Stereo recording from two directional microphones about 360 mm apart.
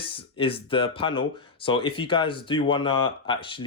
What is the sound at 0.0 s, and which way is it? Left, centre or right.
Speech, centre.